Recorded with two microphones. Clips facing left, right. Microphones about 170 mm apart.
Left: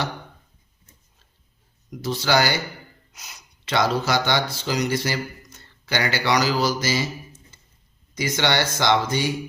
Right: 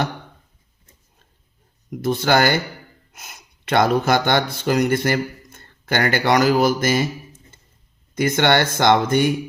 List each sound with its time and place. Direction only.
1.9 s speech: 55° right (ahead or behind)
8.1 s speech: 55° right (ahead or behind)